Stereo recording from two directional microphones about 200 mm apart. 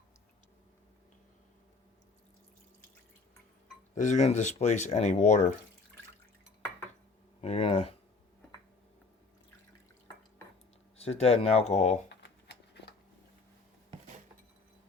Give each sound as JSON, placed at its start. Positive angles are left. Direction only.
{"t": 3.9, "sound": "speech", "side_deg": 35}
{"t": 7.4, "sound": "speech", "side_deg": 30}
{"t": 10.9, "sound": "speech", "side_deg": 30}
{"t": 12.0, "sound": "a sound", "side_deg": 60}